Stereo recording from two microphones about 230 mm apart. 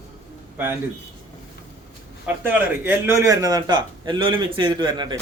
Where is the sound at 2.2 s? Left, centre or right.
Centre.